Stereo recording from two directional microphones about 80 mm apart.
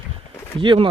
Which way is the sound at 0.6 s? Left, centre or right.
Right.